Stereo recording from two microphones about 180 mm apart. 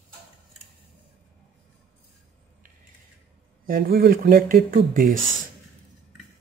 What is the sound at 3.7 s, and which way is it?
Speech, 55° right (ahead or behind).